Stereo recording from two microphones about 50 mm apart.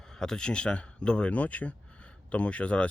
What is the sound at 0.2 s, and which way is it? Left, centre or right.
Speech, centre.